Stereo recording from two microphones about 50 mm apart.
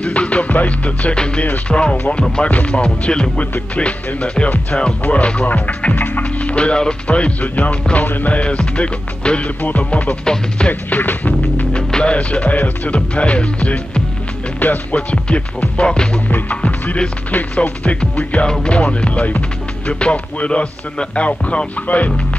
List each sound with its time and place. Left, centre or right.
0.0 s music: left
5.0 s speech: left
6.5 s music: left
8.4 s music: left
9.6 s music: left
10.2 s music: centre
10.7 s music: left
11.7 s music: left
16.3 s music: left